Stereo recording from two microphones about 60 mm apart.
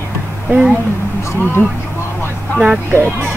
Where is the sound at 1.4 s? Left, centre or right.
Left.